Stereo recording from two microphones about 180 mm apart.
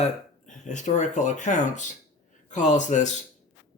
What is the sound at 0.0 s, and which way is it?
Speech, 40° left (ahead or behind).